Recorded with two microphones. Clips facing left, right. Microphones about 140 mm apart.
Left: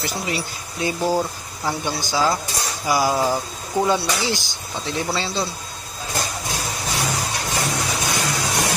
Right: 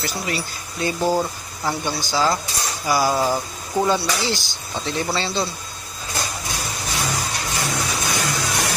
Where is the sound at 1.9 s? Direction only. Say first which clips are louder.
Even; 10° left (ahead or behind).